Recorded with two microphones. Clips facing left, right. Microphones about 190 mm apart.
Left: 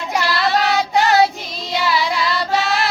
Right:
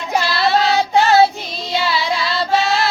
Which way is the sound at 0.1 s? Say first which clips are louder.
Right 2 dB; 25° right (ahead or behind).